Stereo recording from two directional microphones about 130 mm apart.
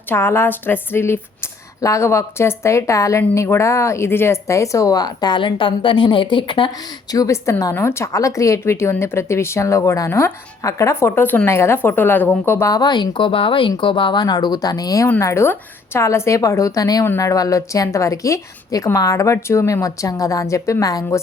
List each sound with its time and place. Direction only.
0.1 s a woman's voice: 20° left (ahead or behind); by 6.7 s 40° left (ahead or behind)
7.1 s a woman's voice: 25° left (ahead or behind)